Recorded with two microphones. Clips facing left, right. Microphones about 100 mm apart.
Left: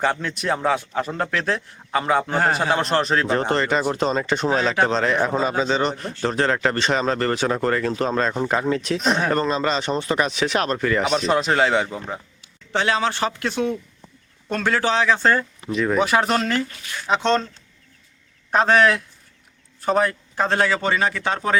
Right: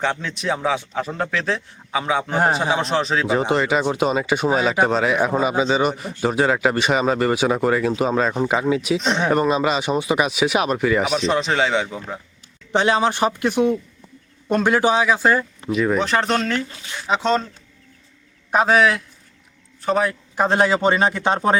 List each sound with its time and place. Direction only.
0.0 s a man's voice: centre (ahead or behind)
9.3 s speech: 10° right (ahead or behind)
12.7 s a man's voice: 20° right (ahead or behind)
18.5 s a man's voice: 5° right (ahead or behind)
20.3 s a man's voice: 15° right (ahead or behind)